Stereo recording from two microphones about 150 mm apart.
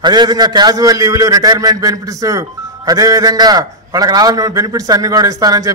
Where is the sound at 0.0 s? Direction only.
30° right (ahead or behind).